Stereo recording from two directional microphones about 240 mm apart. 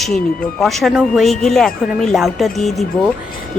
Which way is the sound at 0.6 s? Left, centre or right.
Centre.